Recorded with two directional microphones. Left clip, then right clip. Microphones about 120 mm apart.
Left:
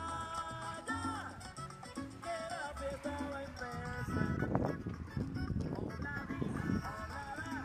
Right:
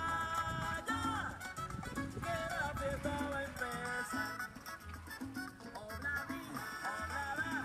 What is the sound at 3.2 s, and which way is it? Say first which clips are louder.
Music: right 3 dB; 20° right (ahead or behind).